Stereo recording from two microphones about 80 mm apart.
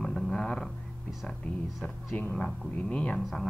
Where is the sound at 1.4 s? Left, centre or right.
Centre.